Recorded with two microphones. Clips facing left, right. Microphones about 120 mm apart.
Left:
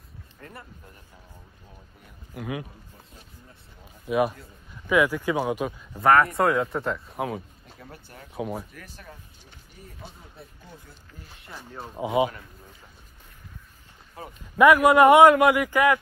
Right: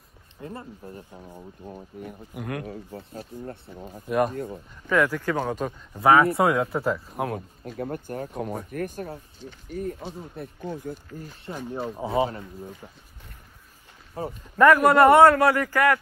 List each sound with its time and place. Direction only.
0.4 s speech: 25° right (ahead or behind); by 2.1 s 50° right (ahead or behind)
2.3 s speech: centre (ahead or behind)
2.6 s speech: 80° right; by 3.9 s 60° right (ahead or behind)
4.8 s a man's voice: 10° left (ahead or behind)
5.9 s speech: 5° right (ahead or behind)
7.6 s speech: 55° right (ahead or behind)
8.4 s speech: 5° left (ahead or behind)
8.7 s speech: 50° right (ahead or behind)
12.0 s a man's voice: 15° left (ahead or behind)
12.3 s speech: 30° right (ahead or behind)
14.2 s speech: 30° right (ahead or behind)
14.6 s a man's voice: 10° left (ahead or behind)